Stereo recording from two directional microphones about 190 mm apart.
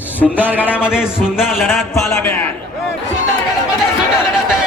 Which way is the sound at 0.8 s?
5° right (ahead or behind).